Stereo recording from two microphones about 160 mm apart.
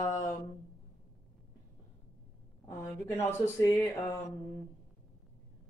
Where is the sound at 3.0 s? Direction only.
15° left (ahead or behind).